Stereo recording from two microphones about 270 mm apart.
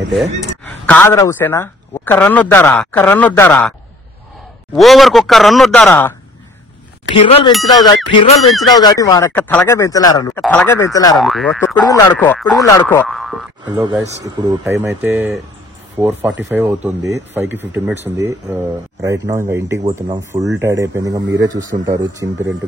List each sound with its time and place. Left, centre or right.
0.7 s a man's voice: centre
4.7 s speech: centre
7.2 s a man's voice: left
11.1 s speech: centre
12.6 s a man's voice: centre
13.0 s speech: centre
13.7 s speech: centre